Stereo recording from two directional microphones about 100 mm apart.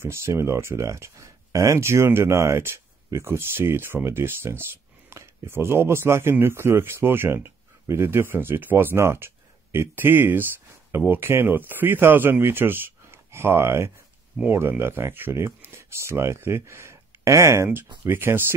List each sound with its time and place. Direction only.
0.0 s speech: 25° right (ahead or behind)